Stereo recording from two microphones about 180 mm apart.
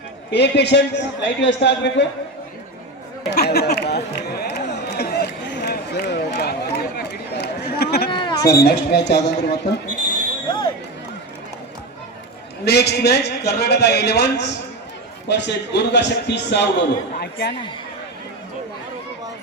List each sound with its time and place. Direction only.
0.3 s a man's voice: 70° left (ahead or behind)
3.2 s chatter: 65° left (ahead or behind)
8.1 s a sound: 25° left (ahead or behind)
8.4 s a man's voice: 65° left (ahead or behind)
12.6 s a man's voice: 65° left (ahead or behind)